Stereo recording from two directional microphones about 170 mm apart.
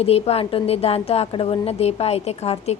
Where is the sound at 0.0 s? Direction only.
35° left (ahead or behind).